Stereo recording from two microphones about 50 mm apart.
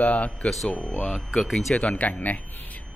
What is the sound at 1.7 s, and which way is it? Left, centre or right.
Speech, left.